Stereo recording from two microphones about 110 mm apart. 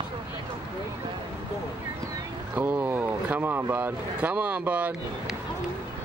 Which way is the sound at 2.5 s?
15° right (ahead or behind).